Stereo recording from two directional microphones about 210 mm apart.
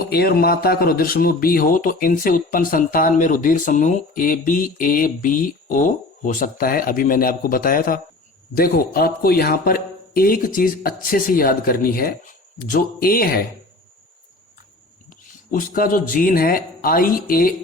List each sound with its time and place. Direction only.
0.1 s speech: 45° left (ahead or behind)
15.5 s speech: 40° left (ahead or behind)